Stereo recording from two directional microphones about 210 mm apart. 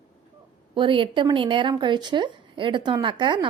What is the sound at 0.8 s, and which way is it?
A woman's voice, 25° right (ahead or behind).